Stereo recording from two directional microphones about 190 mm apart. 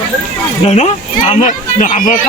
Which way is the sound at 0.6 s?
35° left (ahead or behind).